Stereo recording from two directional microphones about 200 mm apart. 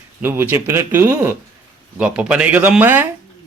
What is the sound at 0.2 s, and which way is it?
Speech, 10° right (ahead or behind).